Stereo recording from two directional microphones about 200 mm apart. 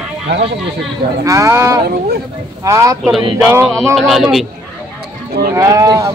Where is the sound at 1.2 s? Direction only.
15° right (ahead or behind).